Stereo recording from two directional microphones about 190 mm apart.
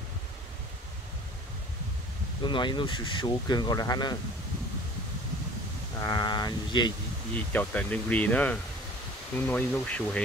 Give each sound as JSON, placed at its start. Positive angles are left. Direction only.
{"t": 2.4, "sound": "speech", "side_deg": 25}
{"t": 5.9, "sound": "speech", "side_deg": 20}
{"t": 7.5, "sound": "speech", "side_deg": 5}